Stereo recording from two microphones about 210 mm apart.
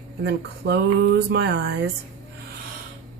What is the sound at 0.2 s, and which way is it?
Speech, 50° right (ahead or behind).